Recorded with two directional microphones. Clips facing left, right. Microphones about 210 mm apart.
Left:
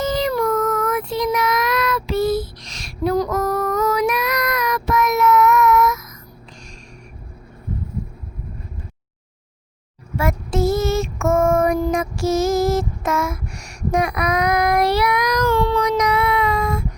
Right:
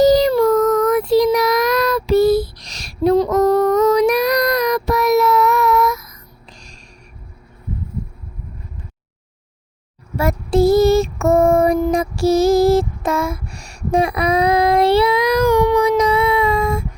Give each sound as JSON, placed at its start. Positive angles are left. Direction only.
{"t": 0.0, "sound": "child singing", "side_deg": -40}
{"t": 3.9, "sound": "child singing", "side_deg": -35}
{"t": 10.2, "sound": "child singing", "side_deg": -35}
{"t": 11.9, "sound": "music", "side_deg": -35}
{"t": 15.4, "sound": "child singing", "side_deg": -15}
{"t": 16.0, "sound": "child singing", "side_deg": -25}